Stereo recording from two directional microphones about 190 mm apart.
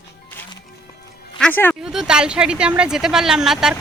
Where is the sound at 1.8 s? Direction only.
5° right (ahead or behind).